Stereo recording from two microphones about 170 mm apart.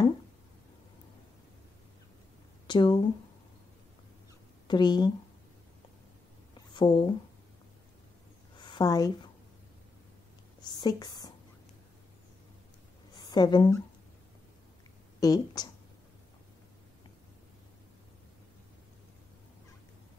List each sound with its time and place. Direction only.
2.6 s speech: 25° left (ahead or behind)
4.6 s a woman's voice: 25° left (ahead or behind)
6.7 s speech: 25° left (ahead or behind)
8.5 s a sound: 25° left (ahead or behind)
10.6 s a sound: 25° left (ahead or behind)
13.3 s a woman's voice: 25° left (ahead or behind)
15.1 s a woman's voice: 20° left (ahead or behind)